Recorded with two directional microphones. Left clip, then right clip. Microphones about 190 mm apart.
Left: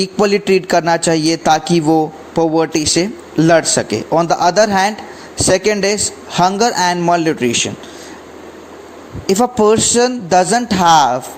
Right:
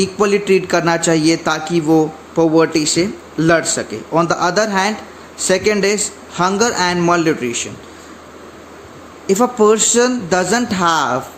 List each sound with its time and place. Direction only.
0.0 s a man's voice: 30° left (ahead or behind)
9.2 s a man's voice: 30° left (ahead or behind)